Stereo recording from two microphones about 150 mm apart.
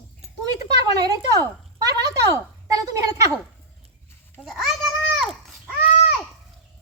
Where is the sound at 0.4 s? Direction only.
25° right (ahead or behind).